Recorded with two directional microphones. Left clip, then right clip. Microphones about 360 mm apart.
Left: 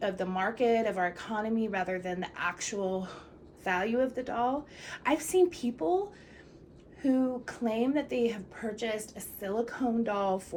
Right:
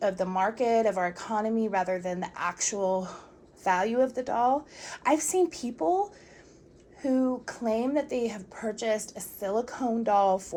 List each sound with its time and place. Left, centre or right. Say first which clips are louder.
0.0 s a woman's voice: right 5 dB; centre
7.0 s a woman's voice: right 2 dB; centre